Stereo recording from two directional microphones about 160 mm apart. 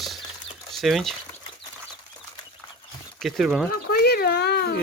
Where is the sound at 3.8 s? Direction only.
85° left.